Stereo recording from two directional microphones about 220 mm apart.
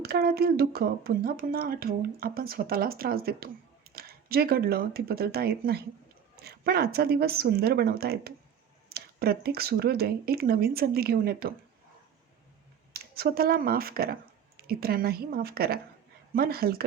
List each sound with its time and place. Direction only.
0.0 s speech: 45° right (ahead or behind)
12.9 s speech: 45° right (ahead or behind)